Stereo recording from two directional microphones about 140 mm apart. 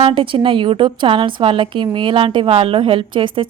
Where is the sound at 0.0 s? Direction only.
35° right (ahead or behind).